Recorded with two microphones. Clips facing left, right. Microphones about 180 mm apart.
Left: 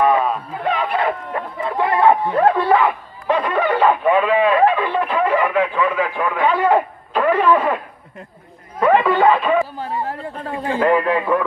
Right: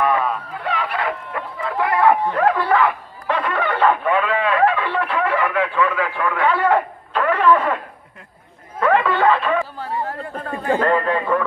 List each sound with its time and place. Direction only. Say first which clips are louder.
0.0 s a sound: left 3 dB; 20° left (ahead or behind)
2.3 s bow-wow: left 2 dB; 25° left (ahead or behind)
8.7 s chatter: left 3 dB; 15° left (ahead or behind)
10.8 s a man's voice: left 6 dB; 10° left (ahead or behind)